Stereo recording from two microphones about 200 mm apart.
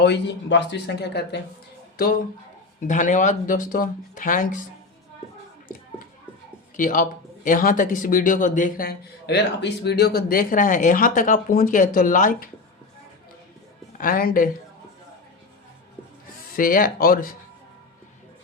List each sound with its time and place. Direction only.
0.0 s a man's voice: 60° left (ahead or behind)
2.8 s speech: 40° left (ahead or behind)
6.7 s a man's voice: 40° left (ahead or behind)
14.0 s a man's voice: 45° left (ahead or behind)
16.6 s a man's voice: 45° left (ahead or behind)